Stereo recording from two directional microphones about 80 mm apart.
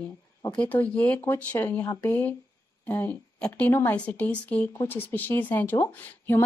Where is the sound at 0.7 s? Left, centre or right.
Left.